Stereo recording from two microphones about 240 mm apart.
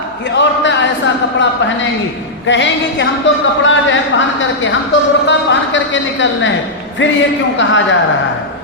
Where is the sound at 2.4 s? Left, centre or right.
Left.